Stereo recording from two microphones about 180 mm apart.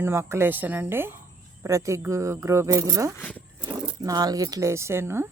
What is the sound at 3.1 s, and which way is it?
Speech, 10° left (ahead or behind).